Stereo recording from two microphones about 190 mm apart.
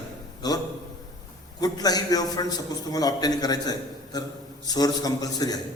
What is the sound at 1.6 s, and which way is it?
A man's voice, 20° left (ahead or behind).